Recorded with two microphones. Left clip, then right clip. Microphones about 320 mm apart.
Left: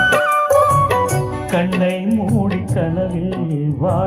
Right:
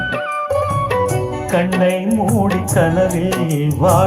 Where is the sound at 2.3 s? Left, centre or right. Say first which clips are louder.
Right 5 dB; right.